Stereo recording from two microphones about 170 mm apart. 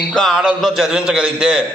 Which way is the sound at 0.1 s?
Centre (ahead or behind).